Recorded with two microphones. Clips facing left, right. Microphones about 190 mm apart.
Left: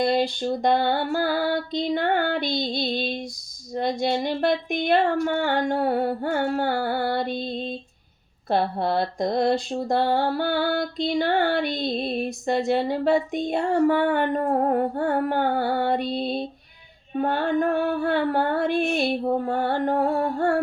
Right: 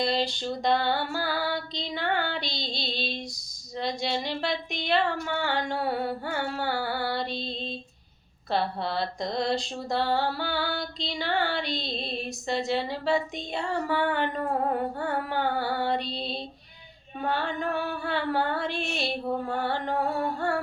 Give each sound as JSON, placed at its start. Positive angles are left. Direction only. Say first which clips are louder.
{"t": 0.0, "sound": "mantra", "louder": "left 5 dB", "side_deg": 55}